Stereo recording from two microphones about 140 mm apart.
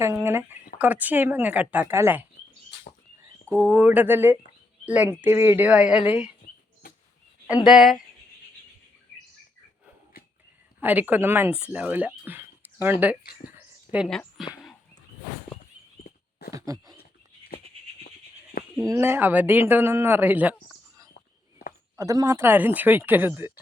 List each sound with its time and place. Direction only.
0.0 s speech: 15° right (ahead or behind)
3.5 s speech: 15° right (ahead or behind)
7.7 s speech: centre (ahead or behind)
10.8 s speech: 15° right (ahead or behind)
13.6 s a sound: 10° right (ahead or behind)
14.1 s speech: 5° left (ahead or behind)
14.5 s a sound: centre (ahead or behind)
16.5 s a sound: 25° right (ahead or behind)
18.8 s speech: 20° right (ahead or behind)
21.9 s speech: 25° right (ahead or behind)